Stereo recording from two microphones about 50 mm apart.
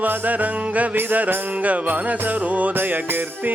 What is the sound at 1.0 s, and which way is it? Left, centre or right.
Music, right.